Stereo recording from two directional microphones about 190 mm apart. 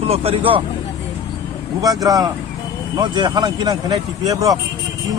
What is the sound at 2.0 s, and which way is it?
Speech, 20° right (ahead or behind).